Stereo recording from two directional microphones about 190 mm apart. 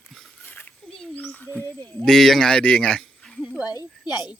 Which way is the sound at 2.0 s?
Centre (ahead or behind).